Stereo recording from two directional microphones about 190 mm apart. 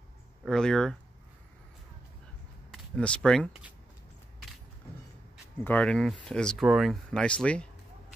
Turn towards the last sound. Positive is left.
turn(degrees=5)  # may be behind; listen again after turning